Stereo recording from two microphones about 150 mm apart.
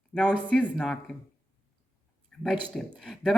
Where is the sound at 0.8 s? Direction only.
Centre (ahead or behind).